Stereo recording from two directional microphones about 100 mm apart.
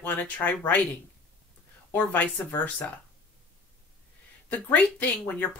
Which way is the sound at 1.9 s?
20° left (ahead or behind).